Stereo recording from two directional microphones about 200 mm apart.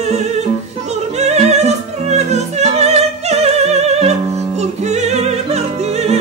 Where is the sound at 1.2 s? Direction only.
35° right (ahead or behind).